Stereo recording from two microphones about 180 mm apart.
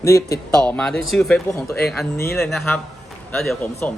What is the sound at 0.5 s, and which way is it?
Speech, 5° left (ahead or behind).